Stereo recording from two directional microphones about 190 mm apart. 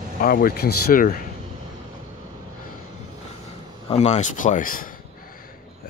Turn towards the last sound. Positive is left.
turn(degrees=45)  # may be behind; listen again after turning